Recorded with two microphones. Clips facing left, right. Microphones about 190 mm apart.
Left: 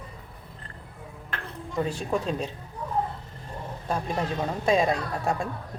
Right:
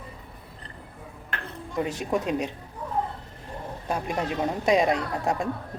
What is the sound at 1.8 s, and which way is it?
Speech, 20° right (ahead or behind).